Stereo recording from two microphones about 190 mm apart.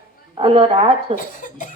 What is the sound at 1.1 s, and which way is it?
Speech, 45° left (ahead or behind).